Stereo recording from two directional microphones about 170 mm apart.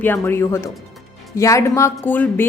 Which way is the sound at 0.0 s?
10° left (ahead or behind).